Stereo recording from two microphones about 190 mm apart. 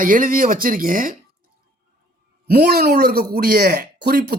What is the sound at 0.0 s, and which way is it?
Speech, 45° right (ahead or behind).